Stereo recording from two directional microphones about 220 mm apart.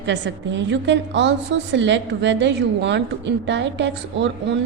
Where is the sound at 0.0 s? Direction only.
55° right (ahead or behind).